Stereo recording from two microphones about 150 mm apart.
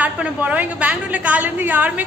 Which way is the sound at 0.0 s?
10° right (ahead or behind).